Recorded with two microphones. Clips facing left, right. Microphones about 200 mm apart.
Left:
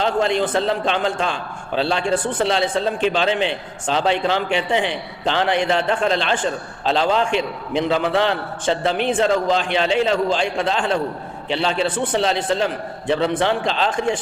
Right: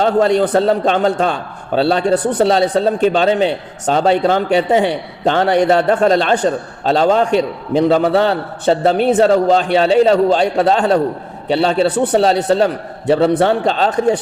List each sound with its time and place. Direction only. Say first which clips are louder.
0.0 s a man's voice: right 6 dB; 40° right (ahead or behind)